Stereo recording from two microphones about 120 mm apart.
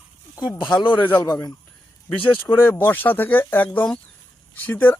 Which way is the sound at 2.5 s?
20° left (ahead or behind).